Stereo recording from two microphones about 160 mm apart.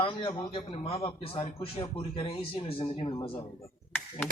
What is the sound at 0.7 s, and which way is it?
Speech, 40° left (ahead or behind).